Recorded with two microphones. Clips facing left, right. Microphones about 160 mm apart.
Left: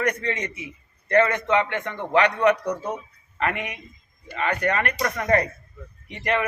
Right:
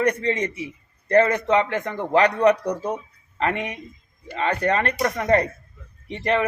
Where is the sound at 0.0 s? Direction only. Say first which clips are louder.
Right 4 dB; 30° right (ahead or behind).